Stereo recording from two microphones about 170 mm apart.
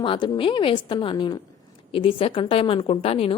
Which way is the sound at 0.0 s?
30° left (ahead or behind).